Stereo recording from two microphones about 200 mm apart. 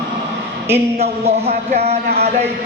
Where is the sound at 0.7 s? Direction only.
30° right (ahead or behind).